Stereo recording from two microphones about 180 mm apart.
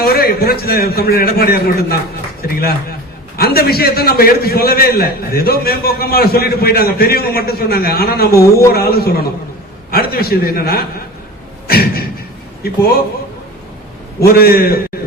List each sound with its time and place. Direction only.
0.0 s a man's voice: 60° left (ahead or behind)
11.7 s beatboxing: 60° left (ahead or behind)
14.3 s a man's voice: 60° left (ahead or behind)